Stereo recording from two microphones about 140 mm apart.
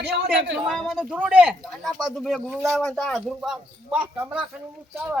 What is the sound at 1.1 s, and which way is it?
Speech, 10° right (ahead or behind).